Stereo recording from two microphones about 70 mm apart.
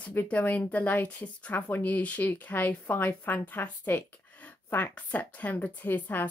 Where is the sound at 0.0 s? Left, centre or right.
Left.